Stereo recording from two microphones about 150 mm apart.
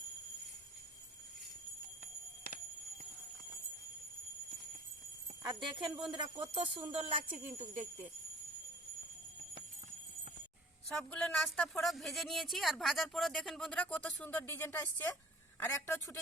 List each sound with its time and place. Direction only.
5.4 s speech: 30° right (ahead or behind); by 8.0 s 50° right (ahead or behind)
10.8 s a woman's voice: 5° left (ahead or behind)